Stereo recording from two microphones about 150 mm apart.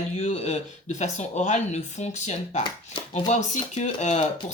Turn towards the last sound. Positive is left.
turn(degrees=50)  # may be behind; listen again after turning